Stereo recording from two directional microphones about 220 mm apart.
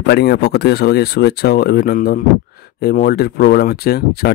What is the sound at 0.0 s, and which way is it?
Speech, 50° left (ahead or behind).